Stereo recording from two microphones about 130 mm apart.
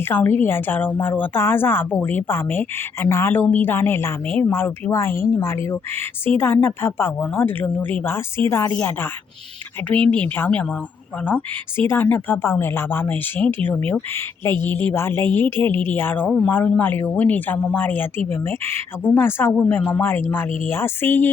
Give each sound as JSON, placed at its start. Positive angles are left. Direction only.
{"t": 0.0, "sound": "a woman's voice", "side_deg": 15}